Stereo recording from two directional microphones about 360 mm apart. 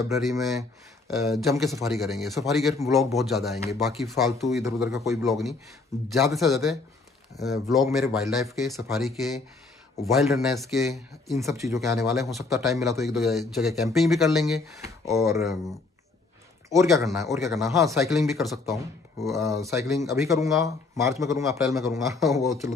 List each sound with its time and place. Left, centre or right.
0.1 s speech: centre
16.6 s speech: centre